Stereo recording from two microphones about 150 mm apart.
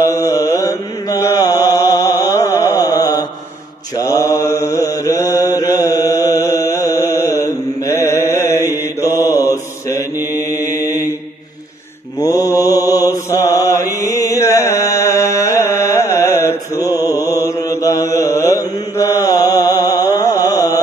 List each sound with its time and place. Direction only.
0.0 s mantra: 20° left (ahead or behind)
9.5 s mantra: 20° left (ahead or behind)
12.4 s mantra: 15° right (ahead or behind)
12.6 s mantra: 25° left (ahead or behind)
13.9 s music: 20° left (ahead or behind)